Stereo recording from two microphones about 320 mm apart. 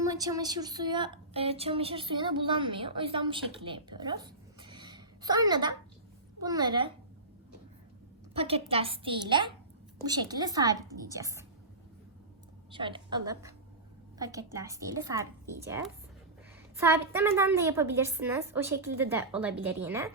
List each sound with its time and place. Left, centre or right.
0.1 s a woman's voice: centre
8.3 s a woman's voice: centre
12.7 s a woman's voice: centre